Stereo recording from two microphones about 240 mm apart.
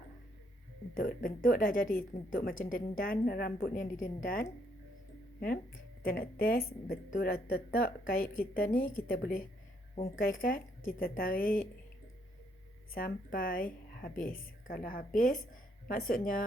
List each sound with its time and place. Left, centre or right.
0.9 s a woman's voice: left
6.0 s a woman's voice: left
12.9 s a woman's voice: left